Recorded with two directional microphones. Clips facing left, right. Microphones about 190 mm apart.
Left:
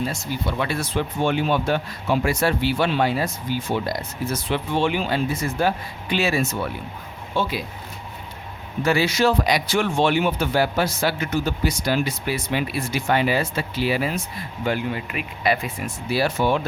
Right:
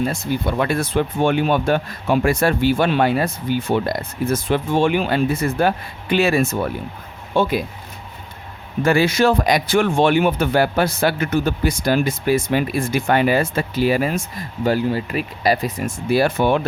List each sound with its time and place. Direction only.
0.0 s speech: 55° right (ahead or behind)
8.8 s speech: 50° right (ahead or behind)